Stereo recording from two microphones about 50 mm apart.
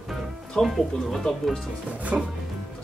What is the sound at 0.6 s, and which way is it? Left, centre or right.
Speech, centre.